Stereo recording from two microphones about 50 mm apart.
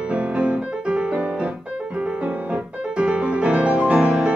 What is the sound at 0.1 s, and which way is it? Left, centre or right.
Music, right.